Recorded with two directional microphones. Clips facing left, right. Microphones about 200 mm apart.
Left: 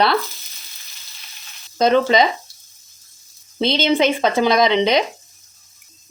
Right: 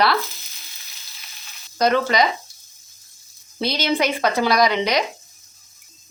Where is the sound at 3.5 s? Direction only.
25° left (ahead or behind).